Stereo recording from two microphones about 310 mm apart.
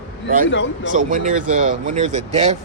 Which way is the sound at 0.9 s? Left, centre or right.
Right.